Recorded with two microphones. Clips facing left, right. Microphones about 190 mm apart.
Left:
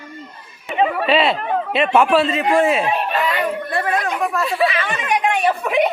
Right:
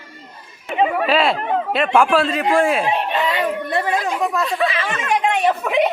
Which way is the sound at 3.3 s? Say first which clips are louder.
Right 1 dB; 25° right (ahead or behind).